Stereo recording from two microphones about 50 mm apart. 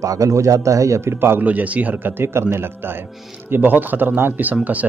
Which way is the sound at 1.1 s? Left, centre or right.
Right.